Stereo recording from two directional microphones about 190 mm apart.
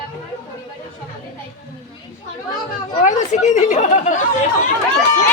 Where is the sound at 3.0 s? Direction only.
40° left (ahead or behind).